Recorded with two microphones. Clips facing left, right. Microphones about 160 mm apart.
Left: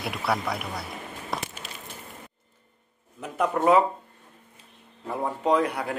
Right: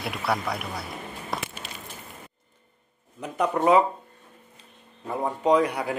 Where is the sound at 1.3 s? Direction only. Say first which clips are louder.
Even; centre (ahead or behind).